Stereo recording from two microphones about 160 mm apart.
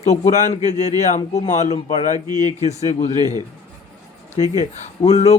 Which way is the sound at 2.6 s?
45° left (ahead or behind).